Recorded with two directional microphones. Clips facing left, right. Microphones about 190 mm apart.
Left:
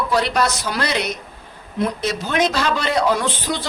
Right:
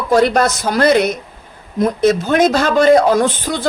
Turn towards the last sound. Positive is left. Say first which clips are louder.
# right 7 dB
turn(degrees=-45)  # may be behind; listen again after turning